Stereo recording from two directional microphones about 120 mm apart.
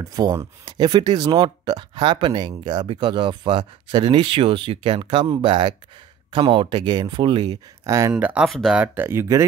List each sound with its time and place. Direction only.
0.0 s speech: 35° right (ahead or behind)
8.2 s speech: 10° right (ahead or behind)
8.5 s speech: centre (ahead or behind)
8.7 s speech: 15° right (ahead or behind)